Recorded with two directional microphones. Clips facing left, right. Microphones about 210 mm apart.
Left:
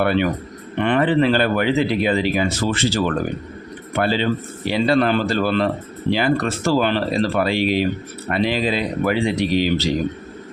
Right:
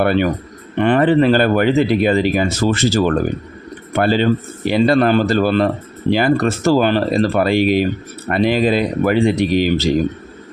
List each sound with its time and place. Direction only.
0.0 s speech: 45° right (ahead or behind)